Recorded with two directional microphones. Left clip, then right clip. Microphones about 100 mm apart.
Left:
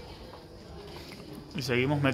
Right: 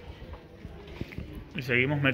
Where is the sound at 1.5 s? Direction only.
20° left (ahead or behind).